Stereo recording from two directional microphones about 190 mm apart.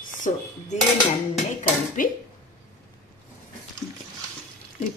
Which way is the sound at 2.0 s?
45° left (ahead or behind).